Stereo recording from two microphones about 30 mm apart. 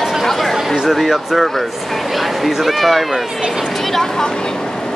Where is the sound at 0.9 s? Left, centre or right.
Centre.